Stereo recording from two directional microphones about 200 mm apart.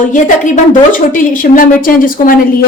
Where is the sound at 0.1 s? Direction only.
40° left (ahead or behind).